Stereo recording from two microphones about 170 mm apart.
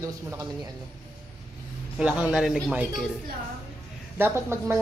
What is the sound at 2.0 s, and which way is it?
Speech, 5° right (ahead or behind).